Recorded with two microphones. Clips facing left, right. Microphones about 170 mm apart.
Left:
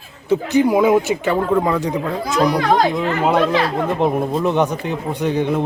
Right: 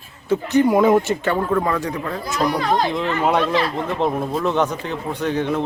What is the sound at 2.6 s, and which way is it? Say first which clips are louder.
Speech: left 4 dB; 75° left (ahead or behind).